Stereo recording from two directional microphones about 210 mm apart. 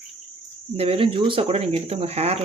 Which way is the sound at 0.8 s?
25° right (ahead or behind).